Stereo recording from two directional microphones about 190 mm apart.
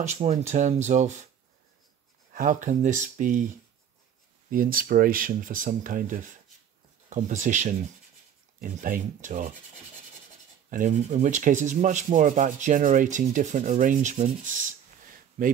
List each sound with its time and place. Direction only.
0.0 s speech: 35° right (ahead or behind)
2.3 s speech: 40° right (ahead or behind)
4.5 s speech: 45° right (ahead or behind)
10.7 s speech: 40° right (ahead or behind)